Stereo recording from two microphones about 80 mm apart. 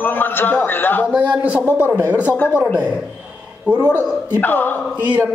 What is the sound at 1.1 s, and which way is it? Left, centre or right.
Speech, centre.